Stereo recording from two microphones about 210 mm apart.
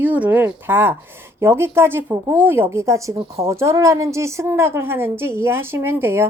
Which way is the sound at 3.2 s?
30° right (ahead or behind).